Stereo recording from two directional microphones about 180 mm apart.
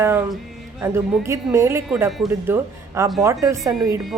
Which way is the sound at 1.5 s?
15° right (ahead or behind).